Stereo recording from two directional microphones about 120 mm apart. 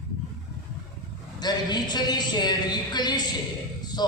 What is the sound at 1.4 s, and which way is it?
A man's voice, 35° left (ahead or behind).